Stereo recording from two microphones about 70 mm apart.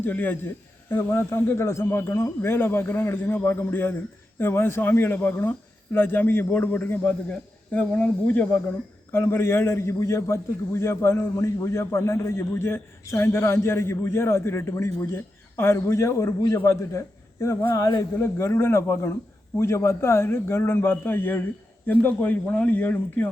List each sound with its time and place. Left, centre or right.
0.0 s a man's voice: left
0.9 s a man's voice: left
9.1 s a man's voice: left